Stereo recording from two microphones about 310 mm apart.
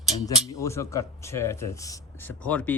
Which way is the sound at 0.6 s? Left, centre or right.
Centre.